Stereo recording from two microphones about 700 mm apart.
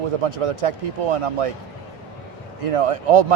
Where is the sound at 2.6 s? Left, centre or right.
Right.